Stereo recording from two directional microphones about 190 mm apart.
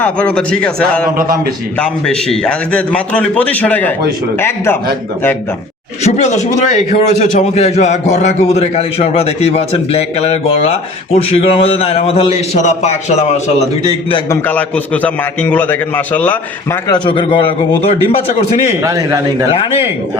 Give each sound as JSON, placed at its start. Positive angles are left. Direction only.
{"t": 0.0, "sound": "a man's voice", "side_deg": 5}
{"t": 1.8, "sound": "a man's voice", "side_deg": 5}
{"t": 6.1, "sound": "a man's voice", "side_deg": 40}
{"t": 14.3, "sound": "a man's voice", "side_deg": 10}
{"t": 16.9, "sound": "a man's voice", "side_deg": 25}
{"t": 18.8, "sound": "a man's voice", "side_deg": -15}
{"t": 19.5, "sound": "a man's voice", "side_deg": 30}